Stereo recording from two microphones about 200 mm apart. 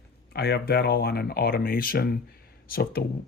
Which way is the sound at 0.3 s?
55° left (ahead or behind).